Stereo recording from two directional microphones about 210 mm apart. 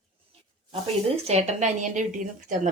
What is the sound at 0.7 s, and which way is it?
Speech, 30° right (ahead or behind).